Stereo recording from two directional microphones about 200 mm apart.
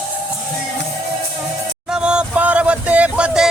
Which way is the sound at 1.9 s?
5° right (ahead or behind).